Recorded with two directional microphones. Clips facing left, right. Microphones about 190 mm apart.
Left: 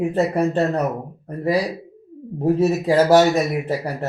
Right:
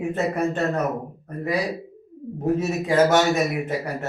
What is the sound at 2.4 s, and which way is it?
Speech, 35° left (ahead or behind).